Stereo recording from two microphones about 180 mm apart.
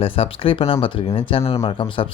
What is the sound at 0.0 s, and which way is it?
Speech, 30° left (ahead or behind).